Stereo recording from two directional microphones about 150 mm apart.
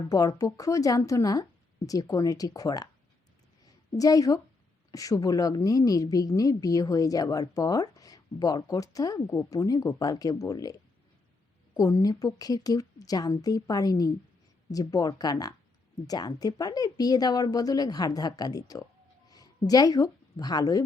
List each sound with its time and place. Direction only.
0.1 s a woman's voice: 25° left (ahead or behind)
3.9 s a woman's voice: 25° left (ahead or behind)